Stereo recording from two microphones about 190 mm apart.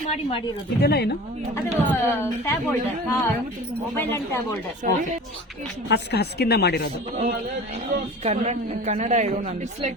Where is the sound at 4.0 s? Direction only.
15° left (ahead or behind).